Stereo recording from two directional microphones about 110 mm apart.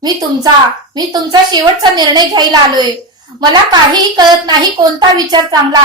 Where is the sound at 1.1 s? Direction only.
40° right (ahead or behind).